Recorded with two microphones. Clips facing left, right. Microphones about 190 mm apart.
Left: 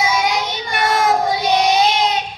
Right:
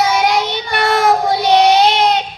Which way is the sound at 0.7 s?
65° right (ahead or behind).